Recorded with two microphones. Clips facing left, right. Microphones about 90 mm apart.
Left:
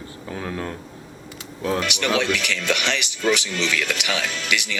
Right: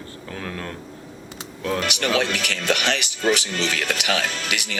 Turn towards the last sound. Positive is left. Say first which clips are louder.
# left 2 dB
turn(degrees=-40)  # may be behind; listen again after turning